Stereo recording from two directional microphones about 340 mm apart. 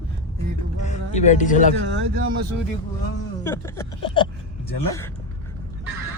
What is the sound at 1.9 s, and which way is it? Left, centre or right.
Speech, right.